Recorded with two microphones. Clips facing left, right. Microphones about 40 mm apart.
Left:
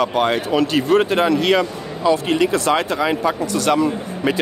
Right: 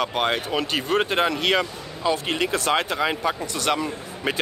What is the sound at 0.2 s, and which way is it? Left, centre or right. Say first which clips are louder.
Speech: left 6 dB; right.